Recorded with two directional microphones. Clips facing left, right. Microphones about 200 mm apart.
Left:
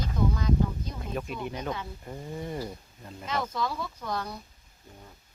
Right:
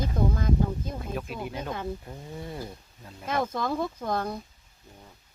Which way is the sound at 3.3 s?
50° right (ahead or behind).